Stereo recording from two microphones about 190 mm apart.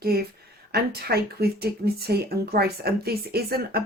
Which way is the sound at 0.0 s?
55° right (ahead or behind).